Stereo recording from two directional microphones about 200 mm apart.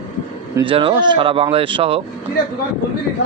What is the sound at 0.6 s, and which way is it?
Speech, 25° right (ahead or behind).